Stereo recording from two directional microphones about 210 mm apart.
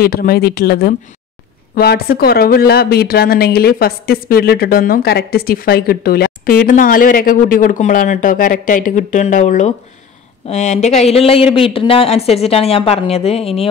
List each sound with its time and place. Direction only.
0.0 s speech: 45° left (ahead or behind); by 13.7 s 30° left (ahead or behind)